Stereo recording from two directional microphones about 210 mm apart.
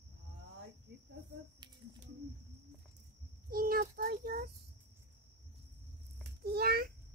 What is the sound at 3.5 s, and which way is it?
Child singing, 45° right (ahead or behind).